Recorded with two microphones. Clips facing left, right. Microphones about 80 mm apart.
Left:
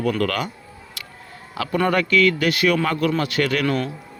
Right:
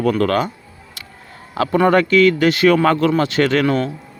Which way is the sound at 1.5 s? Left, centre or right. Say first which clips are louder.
Right 6 dB; right.